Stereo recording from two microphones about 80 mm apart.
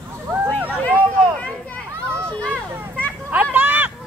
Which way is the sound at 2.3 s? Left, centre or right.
Centre.